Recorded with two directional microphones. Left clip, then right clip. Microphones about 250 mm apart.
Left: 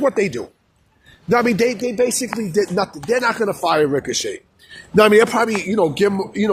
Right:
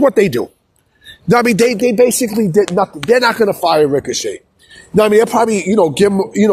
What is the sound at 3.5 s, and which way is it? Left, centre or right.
Speech, centre.